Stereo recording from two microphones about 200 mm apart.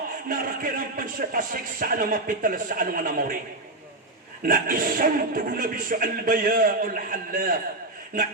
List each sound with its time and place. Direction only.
0.3 s a man's voice: 45° right (ahead or behind)
4.4 s a man's voice: 45° right (ahead or behind)